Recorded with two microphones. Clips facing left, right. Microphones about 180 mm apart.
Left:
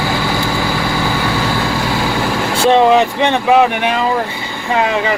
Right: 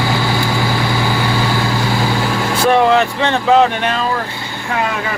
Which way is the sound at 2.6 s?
20° left (ahead or behind).